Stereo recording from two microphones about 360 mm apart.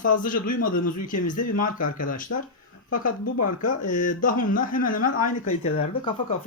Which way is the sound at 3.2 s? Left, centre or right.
Left.